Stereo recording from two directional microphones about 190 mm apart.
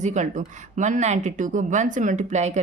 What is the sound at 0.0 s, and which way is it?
Speech, 40° right (ahead or behind).